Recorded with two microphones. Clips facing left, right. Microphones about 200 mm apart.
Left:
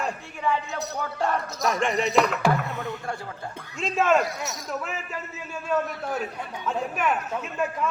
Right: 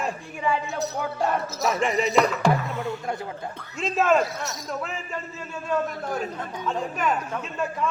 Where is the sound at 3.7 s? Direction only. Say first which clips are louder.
Right 1 dB; centre (ahead or behind).